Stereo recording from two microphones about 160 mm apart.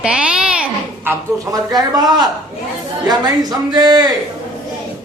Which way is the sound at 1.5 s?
25° right (ahead or behind).